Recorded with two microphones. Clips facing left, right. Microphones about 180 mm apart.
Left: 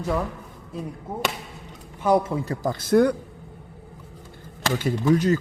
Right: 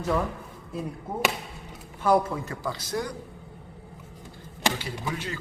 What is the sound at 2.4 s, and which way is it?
Speech, 35° left (ahead or behind).